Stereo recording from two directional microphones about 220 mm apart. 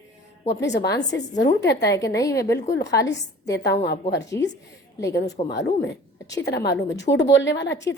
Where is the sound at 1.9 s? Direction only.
15° left (ahead or behind).